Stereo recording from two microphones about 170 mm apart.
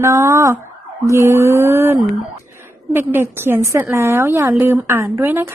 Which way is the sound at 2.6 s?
15° right (ahead or behind).